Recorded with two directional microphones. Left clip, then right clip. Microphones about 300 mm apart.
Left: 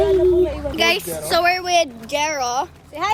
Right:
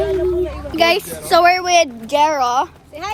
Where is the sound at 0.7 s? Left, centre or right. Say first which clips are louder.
Right 3 dB; centre.